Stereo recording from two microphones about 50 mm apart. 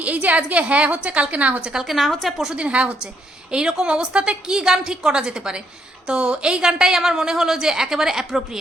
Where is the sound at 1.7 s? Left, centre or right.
Centre.